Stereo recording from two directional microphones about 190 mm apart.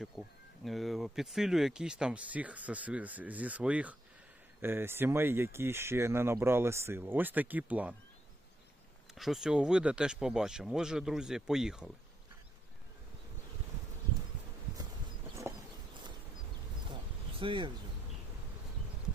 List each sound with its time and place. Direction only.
0.0 s speech: centre (ahead or behind)
9.1 s speech: centre (ahead or behind)
17.4 s speech: 25° right (ahead or behind)